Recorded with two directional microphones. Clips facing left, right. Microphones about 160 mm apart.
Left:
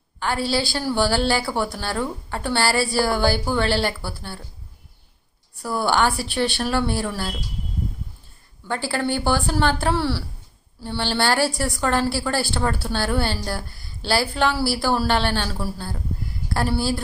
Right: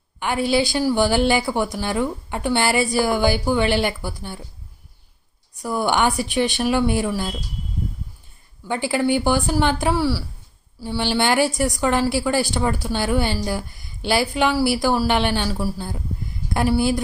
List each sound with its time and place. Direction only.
0.2 s a woman's voice: 20° right (ahead or behind)
5.6 s a woman's voice: 15° right (ahead or behind)
8.6 s a woman's voice: 15° right (ahead or behind)